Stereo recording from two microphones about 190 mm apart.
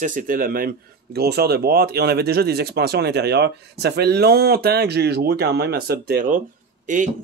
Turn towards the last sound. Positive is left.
turn(degrees=-40)  # may be behind; listen again after turning